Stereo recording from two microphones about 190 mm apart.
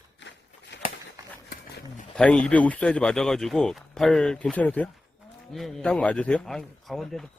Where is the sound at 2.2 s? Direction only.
5° left (ahead or behind).